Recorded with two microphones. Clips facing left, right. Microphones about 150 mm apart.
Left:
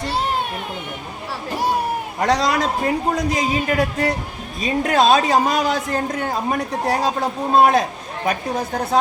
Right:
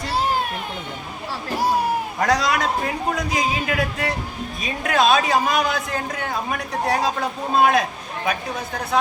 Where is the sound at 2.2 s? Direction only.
30° left (ahead or behind).